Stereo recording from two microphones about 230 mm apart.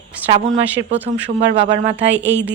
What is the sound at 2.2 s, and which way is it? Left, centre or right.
Speech, centre.